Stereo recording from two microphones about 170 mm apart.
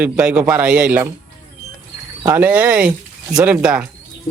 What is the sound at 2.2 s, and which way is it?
Speech, 10° right (ahead or behind).